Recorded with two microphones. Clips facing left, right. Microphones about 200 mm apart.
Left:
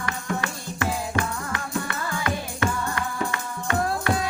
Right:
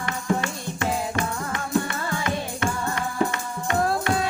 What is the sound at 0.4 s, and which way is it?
Music, 25° right (ahead or behind).